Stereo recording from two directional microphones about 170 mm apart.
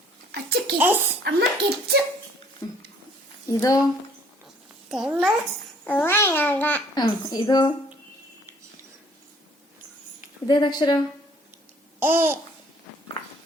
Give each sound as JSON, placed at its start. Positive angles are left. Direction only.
{"t": 0.3, "sound": "a sound", "side_deg": -70}
{"t": 0.8, "sound": "speech", "side_deg": -10}
{"t": 1.2, "sound": "speech", "side_deg": -70}
{"t": 3.5, "sound": "a woman's voice", "side_deg": 20}
{"t": 4.9, "sound": "a child's voice", "side_deg": -5}
{"t": 5.8, "sound": "a child's voice", "side_deg": 10}
{"t": 6.9, "sound": "a woman's voice", "side_deg": 25}
{"t": 10.4, "sound": "a woman's voice", "side_deg": 25}
{"t": 11.9, "sound": "babbling", "side_deg": -15}